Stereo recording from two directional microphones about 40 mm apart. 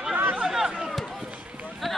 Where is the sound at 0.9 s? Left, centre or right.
Centre.